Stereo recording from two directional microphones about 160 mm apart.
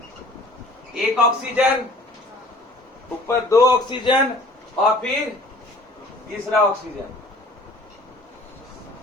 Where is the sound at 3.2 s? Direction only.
20° left (ahead or behind).